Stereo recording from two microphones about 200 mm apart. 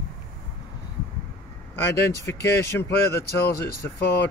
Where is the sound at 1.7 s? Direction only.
15° left (ahead or behind).